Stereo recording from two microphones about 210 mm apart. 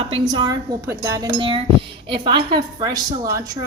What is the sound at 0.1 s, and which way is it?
A woman's voice, 20° right (ahead or behind).